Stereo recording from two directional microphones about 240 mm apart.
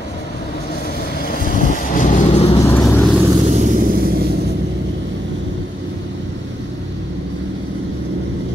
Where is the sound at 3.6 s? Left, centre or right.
Right.